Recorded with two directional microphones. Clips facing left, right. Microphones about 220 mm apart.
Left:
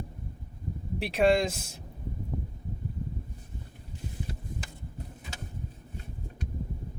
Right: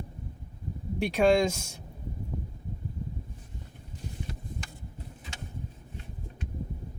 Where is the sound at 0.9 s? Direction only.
5° left (ahead or behind).